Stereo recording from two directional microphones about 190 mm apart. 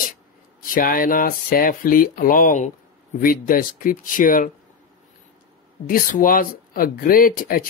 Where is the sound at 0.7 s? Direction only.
50° left (ahead or behind).